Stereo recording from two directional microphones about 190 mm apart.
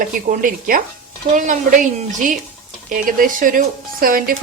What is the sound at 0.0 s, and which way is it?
Speech, 45° right (ahead or behind).